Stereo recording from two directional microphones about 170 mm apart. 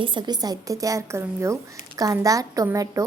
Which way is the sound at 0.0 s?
30° right (ahead or behind).